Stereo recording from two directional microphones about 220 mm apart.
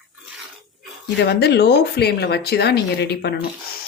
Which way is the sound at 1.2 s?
45° left (ahead or behind).